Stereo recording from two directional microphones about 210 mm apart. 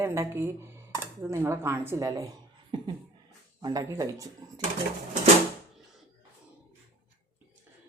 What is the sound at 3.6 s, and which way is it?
A woman's voice, 20° right (ahead or behind).